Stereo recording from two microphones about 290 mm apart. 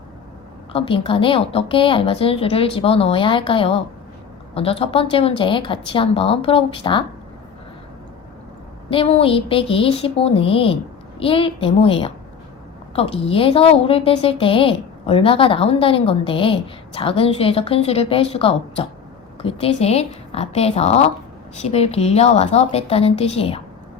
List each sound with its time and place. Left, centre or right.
0.7 s a woman's voice: centre
8.9 s a woman's voice: centre